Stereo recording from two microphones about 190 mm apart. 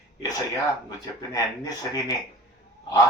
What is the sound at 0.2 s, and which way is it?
Speech, 20° left (ahead or behind).